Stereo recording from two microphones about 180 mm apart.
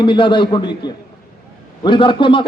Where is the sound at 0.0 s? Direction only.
25° left (ahead or behind).